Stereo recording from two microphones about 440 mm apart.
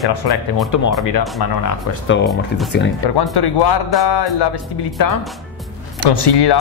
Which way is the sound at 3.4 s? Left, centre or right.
Left.